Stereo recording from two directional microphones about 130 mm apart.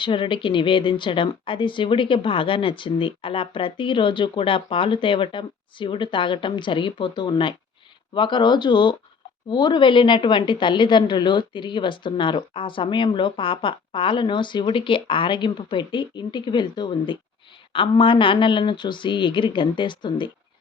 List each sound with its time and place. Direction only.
0.0 s speech: 40° left (ahead or behind)